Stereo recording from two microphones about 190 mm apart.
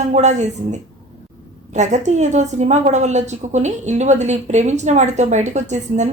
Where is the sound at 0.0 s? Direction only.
35° right (ahead or behind).